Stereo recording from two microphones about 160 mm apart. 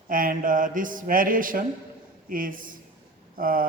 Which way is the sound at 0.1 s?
60° right (ahead or behind).